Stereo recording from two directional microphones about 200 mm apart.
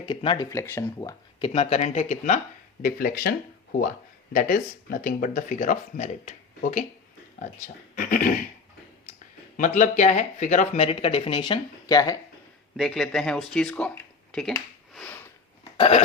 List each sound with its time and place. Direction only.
0.0 s speech: 25° left (ahead or behind)
1.4 s speech: 30° left (ahead or behind)
7.9 s speech: 45° left (ahead or behind)
9.6 s speech: 40° left (ahead or behind); by 12.1 s 20° left (ahead or behind)
12.7 s speech: centre (ahead or behind)
14.9 s sniff: 10° left (ahead or behind)